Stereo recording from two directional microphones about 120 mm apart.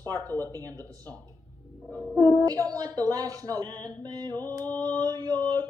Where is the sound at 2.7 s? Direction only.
30° right (ahead or behind).